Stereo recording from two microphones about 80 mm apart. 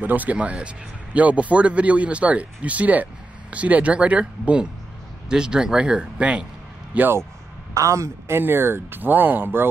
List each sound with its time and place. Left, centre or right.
0.0 s speech: right
7.7 s a man's voice: right
8.4 s speech: right